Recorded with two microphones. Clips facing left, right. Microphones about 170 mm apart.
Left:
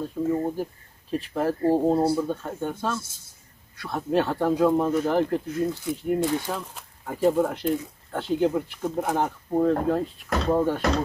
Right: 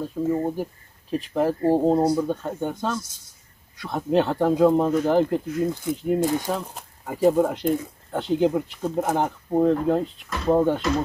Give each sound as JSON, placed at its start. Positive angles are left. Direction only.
{"t": 0.0, "sound": "speech", "side_deg": -10}